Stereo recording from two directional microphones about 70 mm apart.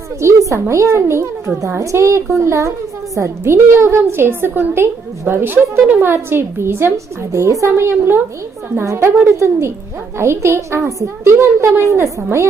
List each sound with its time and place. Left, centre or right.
0.2 s a child's voice: right